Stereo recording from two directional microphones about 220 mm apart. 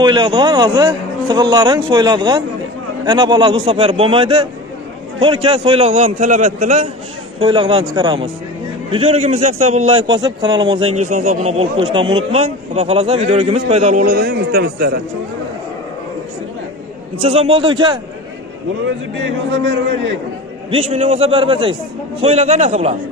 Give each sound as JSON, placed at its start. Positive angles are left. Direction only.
{"t": 0.0, "sound": "speech", "side_deg": -20}
{"t": 11.0, "sound": "speech", "side_deg": -35}
{"t": 14.0, "sound": "speech", "side_deg": -45}
{"t": 17.2, "sound": "speech", "side_deg": -25}
{"t": 19.6, "sound": "speech", "side_deg": -55}
{"t": 20.7, "sound": "speech", "side_deg": -30}